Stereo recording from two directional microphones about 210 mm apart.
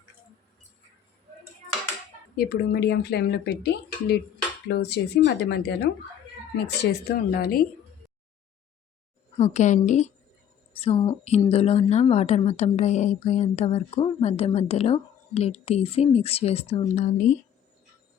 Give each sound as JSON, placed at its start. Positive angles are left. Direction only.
{"t": 2.3, "sound": "speech", "side_deg": 45}
{"t": 4.7, "sound": "speech", "side_deg": 50}
{"t": 7.3, "sound": "speech", "side_deg": 45}
{"t": 9.4, "sound": "a woman's voice", "side_deg": 35}